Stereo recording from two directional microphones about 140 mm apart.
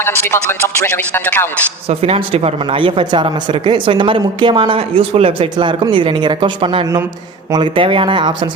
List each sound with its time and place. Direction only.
0.0 s speech: 15° left (ahead or behind)
1.9 s speech: 45° right (ahead or behind)